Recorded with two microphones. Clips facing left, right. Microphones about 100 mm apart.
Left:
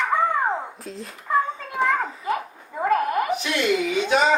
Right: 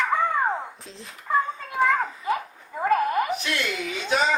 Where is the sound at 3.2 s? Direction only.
20° left (ahead or behind).